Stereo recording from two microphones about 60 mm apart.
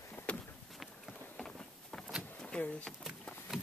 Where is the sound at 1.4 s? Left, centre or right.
Centre.